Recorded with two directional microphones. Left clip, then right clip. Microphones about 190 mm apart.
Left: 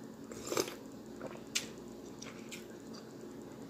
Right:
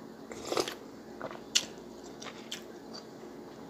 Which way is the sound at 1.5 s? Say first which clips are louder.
Right 9 dB; 5° left (ahead or behind).